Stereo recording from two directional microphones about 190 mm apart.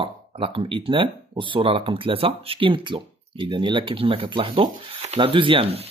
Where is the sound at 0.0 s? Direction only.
30° right (ahead or behind).